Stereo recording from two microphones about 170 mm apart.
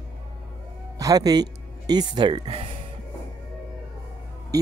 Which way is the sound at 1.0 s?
20° right (ahead or behind).